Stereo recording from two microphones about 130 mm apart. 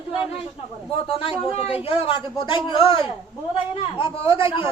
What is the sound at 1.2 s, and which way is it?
A man's voice, 50° left (ahead or behind).